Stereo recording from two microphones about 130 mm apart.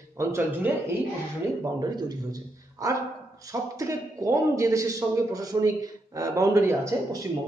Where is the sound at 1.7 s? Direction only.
30° right (ahead or behind).